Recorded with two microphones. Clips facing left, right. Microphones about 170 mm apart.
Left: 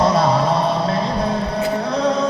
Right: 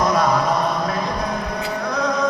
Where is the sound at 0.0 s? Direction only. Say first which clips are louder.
Left 2 dB; 30° left (ahead or behind).